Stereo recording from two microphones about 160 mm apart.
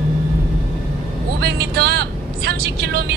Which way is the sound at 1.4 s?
90° right.